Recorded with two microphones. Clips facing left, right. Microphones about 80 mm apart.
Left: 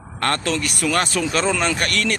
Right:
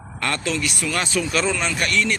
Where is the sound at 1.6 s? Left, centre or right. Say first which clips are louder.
Left 1 dB; left.